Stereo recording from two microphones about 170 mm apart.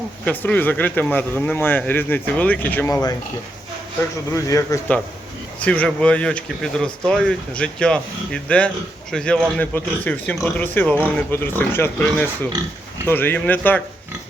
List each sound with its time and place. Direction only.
0.3 s speech: 10° left (ahead or behind)
4.3 s speech: 20° left (ahead or behind)
5.5 s speech: 10° left (ahead or behind)